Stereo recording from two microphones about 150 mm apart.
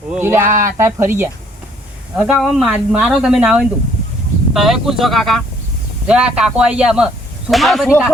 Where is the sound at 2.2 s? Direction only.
Centre (ahead or behind).